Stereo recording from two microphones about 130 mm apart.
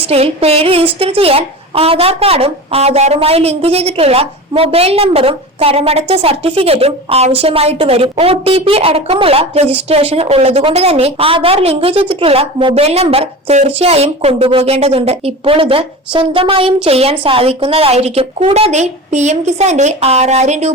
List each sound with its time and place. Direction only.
0.1 s a woman's voice: 50° right (ahead or behind)